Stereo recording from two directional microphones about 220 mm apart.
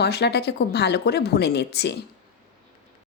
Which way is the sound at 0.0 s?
50° left (ahead or behind).